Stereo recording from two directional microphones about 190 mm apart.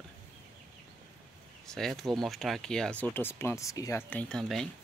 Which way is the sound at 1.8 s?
Centre (ahead or behind).